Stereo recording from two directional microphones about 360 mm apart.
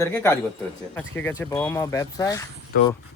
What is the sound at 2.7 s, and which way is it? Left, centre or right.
Speech, left.